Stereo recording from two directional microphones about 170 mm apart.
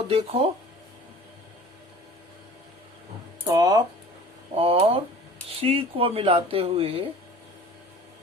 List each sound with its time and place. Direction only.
0.1 s speech: 35° right (ahead or behind)
3.4 s speech: 20° right (ahead or behind)
4.5 s speech: 35° right (ahead or behind)